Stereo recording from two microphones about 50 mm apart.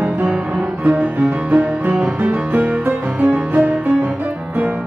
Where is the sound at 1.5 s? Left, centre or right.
Right.